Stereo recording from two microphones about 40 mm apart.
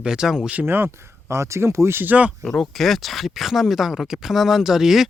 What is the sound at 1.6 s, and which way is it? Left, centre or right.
Speech, right.